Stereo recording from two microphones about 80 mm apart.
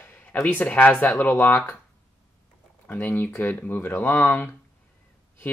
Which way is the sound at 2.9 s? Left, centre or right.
Left.